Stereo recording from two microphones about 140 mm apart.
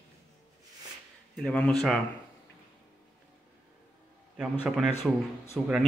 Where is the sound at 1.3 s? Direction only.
5° left (ahead or behind).